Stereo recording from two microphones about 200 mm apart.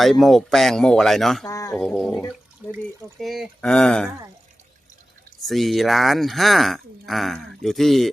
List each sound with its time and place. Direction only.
0.0 s speech: centre (ahead or behind)
1.5 s speech: 15° left (ahead or behind)
1.8 s speech: centre (ahead or behind)
5.4 s speech: centre (ahead or behind)